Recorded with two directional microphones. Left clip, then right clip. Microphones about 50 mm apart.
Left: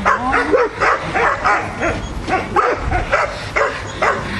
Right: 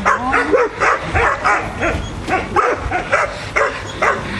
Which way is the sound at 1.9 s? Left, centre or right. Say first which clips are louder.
Even; right.